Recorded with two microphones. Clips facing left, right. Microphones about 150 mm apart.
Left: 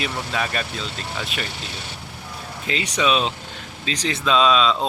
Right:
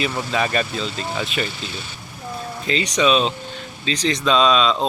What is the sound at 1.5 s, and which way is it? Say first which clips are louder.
Speech: right 3 dB; 70° left (ahead or behind).